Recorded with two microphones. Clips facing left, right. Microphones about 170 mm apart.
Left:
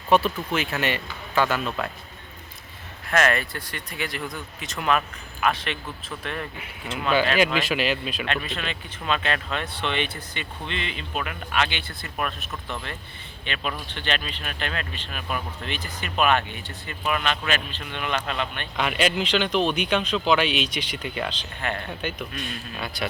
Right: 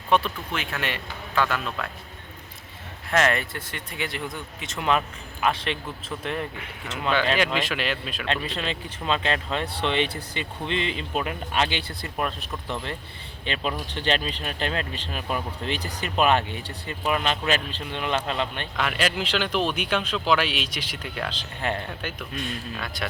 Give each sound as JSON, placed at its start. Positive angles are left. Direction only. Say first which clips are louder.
{"t": 0.1, "sound": "speech", "louder": "left 3 dB", "side_deg": 5}
{"t": 3.1, "sound": "speech", "louder": "even", "side_deg": -20}
{"t": 7.6, "sound": "speech", "louder": "left 3 dB", "side_deg": 5}
{"t": 8.3, "sound": "a man's voice", "louder": "right 4 dB", "side_deg": -30}
{"t": 18.8, "sound": "speech", "louder": "left 2 dB", "side_deg": 0}
{"t": 21.6, "sound": "a man's voice", "louder": "right 2 dB", "side_deg": -30}
{"t": 22.4, "sound": "speech", "louder": "right 1 dB", "side_deg": 0}